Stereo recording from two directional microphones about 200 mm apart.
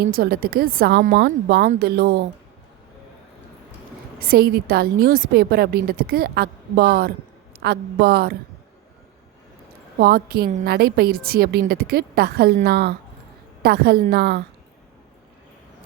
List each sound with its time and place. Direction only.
0.0 s a woman's voice: 50° right (ahead or behind)
4.2 s a woman's voice: 50° right (ahead or behind)
10.0 s a woman's voice: 50° right (ahead or behind)